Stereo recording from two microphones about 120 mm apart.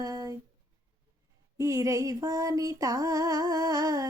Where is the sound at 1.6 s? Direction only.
25° right (ahead or behind).